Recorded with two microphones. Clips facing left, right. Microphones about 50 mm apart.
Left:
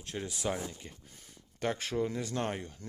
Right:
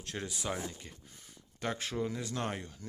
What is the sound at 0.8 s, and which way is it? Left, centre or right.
Speech, left.